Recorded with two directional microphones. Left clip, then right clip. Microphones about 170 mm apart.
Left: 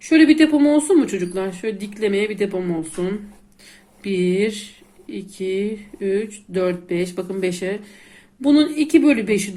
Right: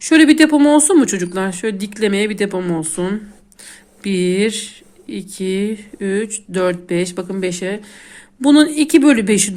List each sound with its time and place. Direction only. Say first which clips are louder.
0.0 s speech: right 3 dB; 45° right (ahead or behind); by 7.8 s 30° right (ahead or behind)
8.4 s speech: right 5 dB; 45° right (ahead or behind)